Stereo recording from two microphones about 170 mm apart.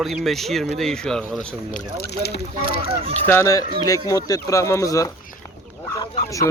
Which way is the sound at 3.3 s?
15° left (ahead or behind).